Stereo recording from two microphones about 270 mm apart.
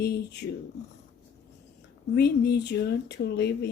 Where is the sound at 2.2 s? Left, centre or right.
Left.